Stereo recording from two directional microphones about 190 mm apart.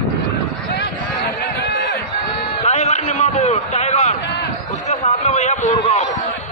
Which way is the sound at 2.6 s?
35° left (ahead or behind).